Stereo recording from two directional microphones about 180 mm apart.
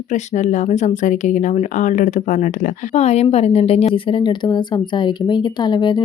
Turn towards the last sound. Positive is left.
turn(degrees=25)  # may be behind; listen again after turning